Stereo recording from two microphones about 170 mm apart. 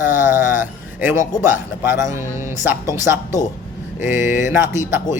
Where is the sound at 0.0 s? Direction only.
10° right (ahead or behind).